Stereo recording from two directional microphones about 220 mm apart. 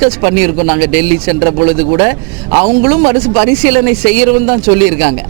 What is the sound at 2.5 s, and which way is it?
Speech, 30° right (ahead or behind).